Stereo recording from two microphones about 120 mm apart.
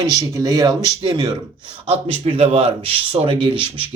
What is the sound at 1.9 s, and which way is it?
A man's voice, 55° right (ahead or behind).